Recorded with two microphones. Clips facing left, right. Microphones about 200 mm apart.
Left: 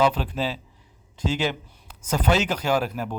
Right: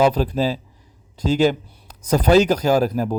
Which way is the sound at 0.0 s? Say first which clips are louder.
Right 5 dB; 40° right (ahead or behind).